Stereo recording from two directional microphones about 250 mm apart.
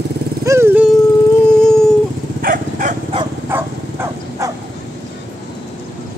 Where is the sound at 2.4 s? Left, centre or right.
Right.